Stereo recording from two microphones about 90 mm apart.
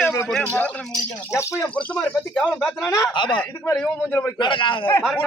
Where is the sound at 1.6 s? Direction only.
15° left (ahead or behind).